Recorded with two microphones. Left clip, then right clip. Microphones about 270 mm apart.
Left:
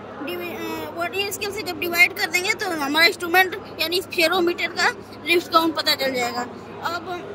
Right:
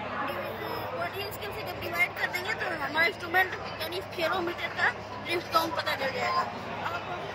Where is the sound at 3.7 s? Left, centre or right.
Left.